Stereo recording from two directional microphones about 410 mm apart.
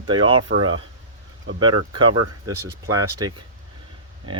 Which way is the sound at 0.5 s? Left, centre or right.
Right.